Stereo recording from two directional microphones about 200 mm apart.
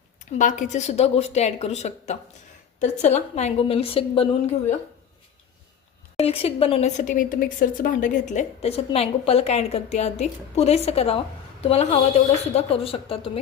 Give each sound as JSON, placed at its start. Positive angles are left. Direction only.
{"t": 0.3, "sound": "speech", "side_deg": 40}
{"t": 6.1, "sound": "a woman's voice", "side_deg": 30}